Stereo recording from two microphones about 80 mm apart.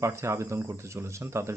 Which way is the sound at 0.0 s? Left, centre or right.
Right.